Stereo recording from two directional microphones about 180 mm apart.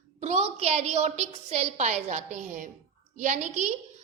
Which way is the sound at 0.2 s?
35° right (ahead or behind).